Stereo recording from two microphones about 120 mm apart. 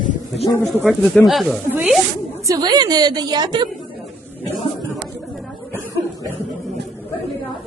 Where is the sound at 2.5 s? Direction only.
35° right (ahead or behind).